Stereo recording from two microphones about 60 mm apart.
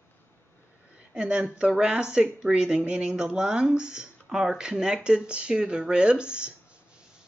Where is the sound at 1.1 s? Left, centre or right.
Centre.